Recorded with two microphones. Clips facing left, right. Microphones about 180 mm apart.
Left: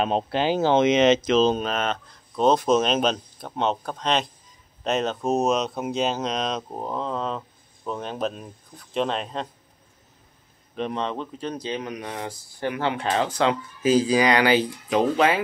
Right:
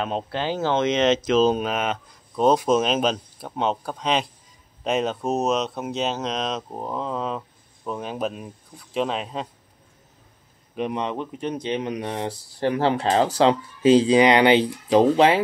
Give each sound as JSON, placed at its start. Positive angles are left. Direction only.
{"t": 0.0, "sound": "speech", "side_deg": 20}
{"t": 10.8, "sound": "speech", "side_deg": -15}